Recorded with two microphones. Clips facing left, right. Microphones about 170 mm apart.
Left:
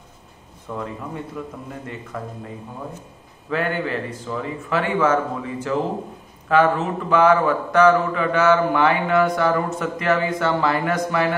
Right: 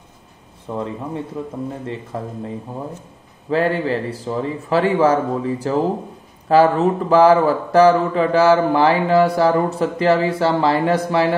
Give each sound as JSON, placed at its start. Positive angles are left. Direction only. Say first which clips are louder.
{"t": 0.7, "sound": "speech", "louder": "right 4 dB", "side_deg": -30}
{"t": 3.4, "sound": "a man's voice", "louder": "right 5 dB", "side_deg": -30}